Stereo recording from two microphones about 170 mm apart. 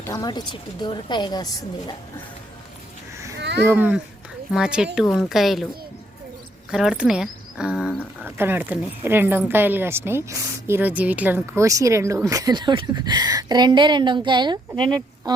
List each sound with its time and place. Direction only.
0.0 s a woman's voice: 20° left (ahead or behind)
3.3 s a sound: 85° right
3.7 s speech: 10° right (ahead or behind)
6.7 s a woman's voice: 5° right (ahead or behind); by 15.0 s 25° right (ahead or behind)